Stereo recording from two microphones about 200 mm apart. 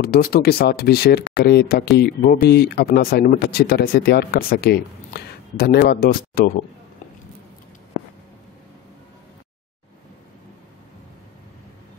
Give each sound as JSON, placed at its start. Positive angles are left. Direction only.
{"t": 0.0, "sound": "speech", "side_deg": 50}